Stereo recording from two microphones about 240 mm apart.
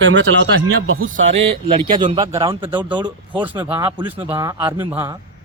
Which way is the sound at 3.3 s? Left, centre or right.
Centre.